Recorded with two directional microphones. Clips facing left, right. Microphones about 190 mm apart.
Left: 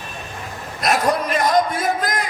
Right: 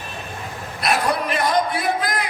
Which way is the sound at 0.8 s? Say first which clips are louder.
Left 2 dB; 45° left (ahead or behind).